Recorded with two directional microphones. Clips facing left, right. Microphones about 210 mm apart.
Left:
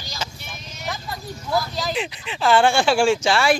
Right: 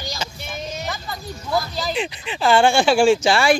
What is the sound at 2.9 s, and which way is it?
Speech, 20° right (ahead or behind).